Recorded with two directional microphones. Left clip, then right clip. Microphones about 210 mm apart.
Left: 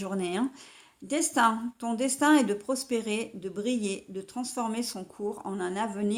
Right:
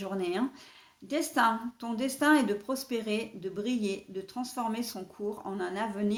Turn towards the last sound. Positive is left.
turn(degrees=30)  # may be behind; listen again after turning